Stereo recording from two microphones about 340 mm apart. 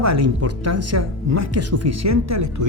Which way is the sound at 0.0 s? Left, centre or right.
Right.